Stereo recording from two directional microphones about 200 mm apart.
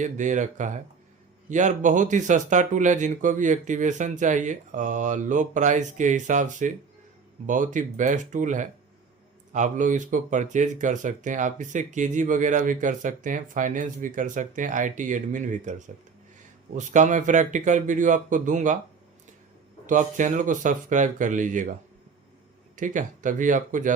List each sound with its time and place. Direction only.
0.0 s speech: 40° right (ahead or behind)
16.7 s speech: 40° right (ahead or behind)
19.9 s speech: 40° right (ahead or behind)